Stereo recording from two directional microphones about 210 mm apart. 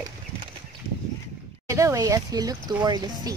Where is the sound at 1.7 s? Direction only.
15° right (ahead or behind).